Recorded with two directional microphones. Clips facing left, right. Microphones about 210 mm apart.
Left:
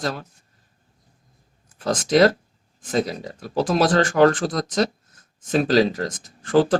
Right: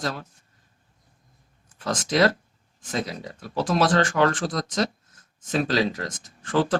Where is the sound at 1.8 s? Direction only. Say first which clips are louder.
Left 5 dB; 35° left (ahead or behind).